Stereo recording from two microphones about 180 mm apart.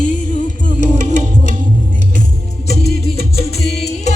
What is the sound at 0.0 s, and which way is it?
Music, 45° left (ahead or behind).